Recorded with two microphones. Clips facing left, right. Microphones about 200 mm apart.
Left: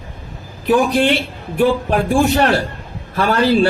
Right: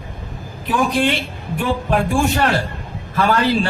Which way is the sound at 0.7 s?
40° left (ahead or behind).